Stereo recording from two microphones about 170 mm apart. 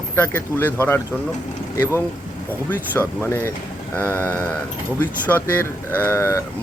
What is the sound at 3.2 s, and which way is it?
Speech, 15° left (ahead or behind).